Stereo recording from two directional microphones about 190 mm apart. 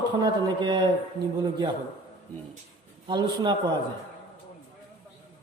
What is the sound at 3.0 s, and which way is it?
Speech, 25° right (ahead or behind).